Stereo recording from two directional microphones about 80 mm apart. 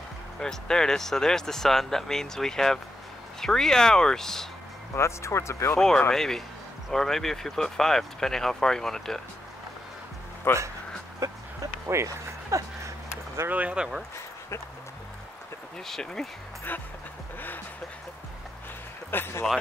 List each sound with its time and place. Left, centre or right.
0.4 s speech: centre
4.9 s speech: left
6.1 s speech: centre
10.5 s speech: left
11.1 s a sound: right
13.5 s speech: centre
15.8 s speech: centre
19.0 s speech: left